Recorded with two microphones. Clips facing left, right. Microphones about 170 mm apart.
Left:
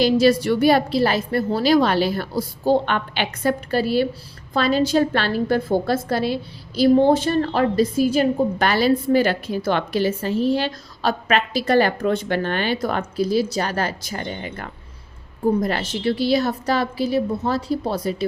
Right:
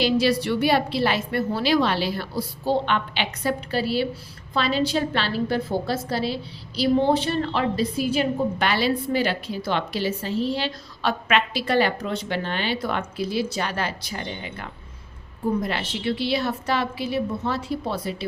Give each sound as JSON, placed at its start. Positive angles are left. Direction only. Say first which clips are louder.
{"t": 0.0, "sound": "a woman's voice", "louder": "left 5 dB", "side_deg": 45}